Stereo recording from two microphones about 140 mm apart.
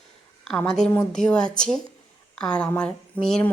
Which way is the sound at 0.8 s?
5° left (ahead or behind).